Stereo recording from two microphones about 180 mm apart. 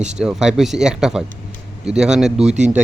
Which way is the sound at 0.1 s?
5° right (ahead or behind).